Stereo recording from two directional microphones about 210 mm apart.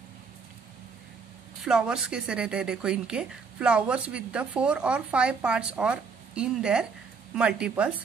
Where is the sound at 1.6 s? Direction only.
5° right (ahead or behind).